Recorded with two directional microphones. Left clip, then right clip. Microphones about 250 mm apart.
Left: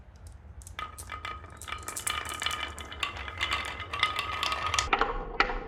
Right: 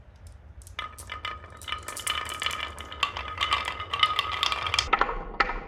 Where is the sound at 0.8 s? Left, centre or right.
Centre.